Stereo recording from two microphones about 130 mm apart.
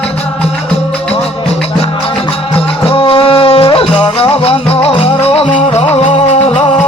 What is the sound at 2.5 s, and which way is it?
Music, 45° left (ahead or behind).